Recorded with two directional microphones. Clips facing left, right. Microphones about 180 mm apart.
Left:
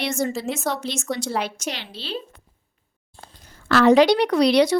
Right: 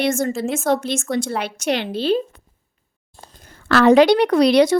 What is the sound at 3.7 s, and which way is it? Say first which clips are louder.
Speech: right 3 dB; 60° right (ahead or behind).